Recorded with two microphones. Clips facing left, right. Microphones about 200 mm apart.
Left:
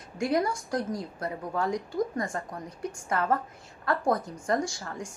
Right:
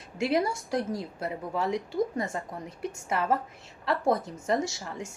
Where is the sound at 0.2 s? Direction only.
25° right (ahead or behind).